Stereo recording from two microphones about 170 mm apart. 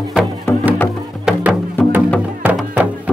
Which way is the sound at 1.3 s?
5° right (ahead or behind).